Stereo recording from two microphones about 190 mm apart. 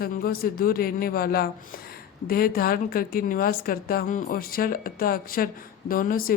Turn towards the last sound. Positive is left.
turn(degrees=50)  # may be behind; listen again after turning